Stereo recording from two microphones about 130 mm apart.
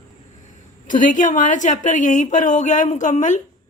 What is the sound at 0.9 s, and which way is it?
A woman's voice, 90° left.